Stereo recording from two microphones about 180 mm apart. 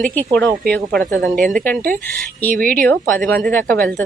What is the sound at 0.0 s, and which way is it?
Speech, 5° left (ahead or behind).